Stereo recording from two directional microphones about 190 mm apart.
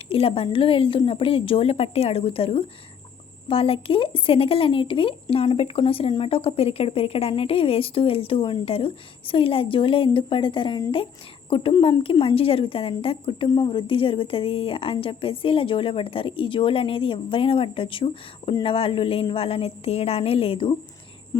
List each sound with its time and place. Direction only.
0.1 s speech: 30° left (ahead or behind)